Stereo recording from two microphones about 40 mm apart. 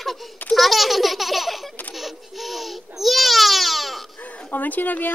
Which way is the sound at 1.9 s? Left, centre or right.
Centre.